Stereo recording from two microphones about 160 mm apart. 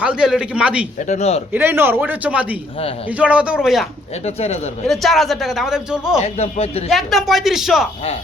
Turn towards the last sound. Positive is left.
turn(degrees=0)  # may be behind; listen again after turning